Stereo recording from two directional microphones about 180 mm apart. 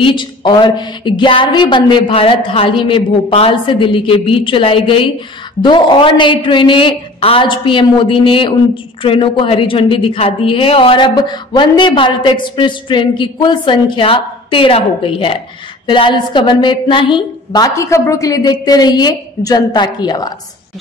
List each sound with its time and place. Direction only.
0.0 s a woman's voice: 25° left (ahead or behind)